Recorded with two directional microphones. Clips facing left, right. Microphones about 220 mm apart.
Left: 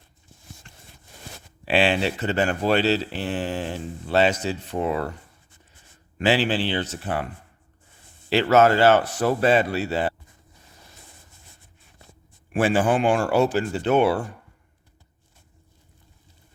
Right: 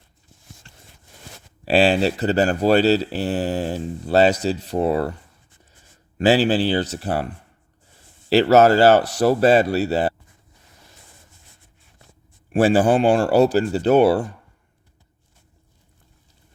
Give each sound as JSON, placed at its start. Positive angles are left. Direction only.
{"t": 1.6, "sound": "speech", "side_deg": -40}
{"t": 6.1, "sound": "speech", "side_deg": -40}
{"t": 8.3, "sound": "speech", "side_deg": -40}
{"t": 12.5, "sound": "speech", "side_deg": -35}